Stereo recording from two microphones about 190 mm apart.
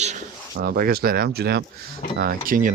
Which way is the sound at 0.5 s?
50° right (ahead or behind).